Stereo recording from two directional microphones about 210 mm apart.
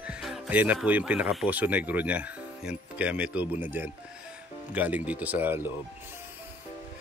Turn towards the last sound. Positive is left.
turn(degrees=-10)  # may be behind; listen again after turning